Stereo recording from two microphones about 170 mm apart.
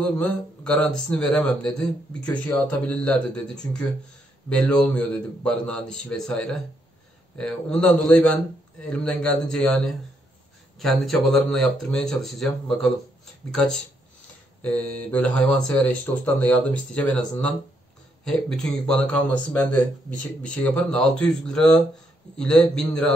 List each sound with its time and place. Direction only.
0.0 s speech: 5° left (ahead or behind)